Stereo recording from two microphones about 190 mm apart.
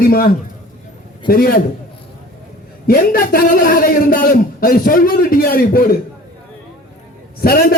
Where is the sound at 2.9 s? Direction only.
50° left (ahead or behind).